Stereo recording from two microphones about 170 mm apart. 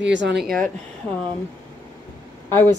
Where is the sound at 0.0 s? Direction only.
90° right.